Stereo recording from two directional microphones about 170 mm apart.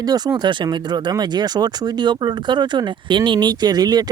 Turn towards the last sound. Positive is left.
turn(degrees=-25)  # may be behind; listen again after turning